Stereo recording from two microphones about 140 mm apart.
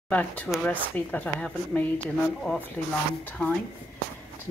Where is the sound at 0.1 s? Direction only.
10° left (ahead or behind).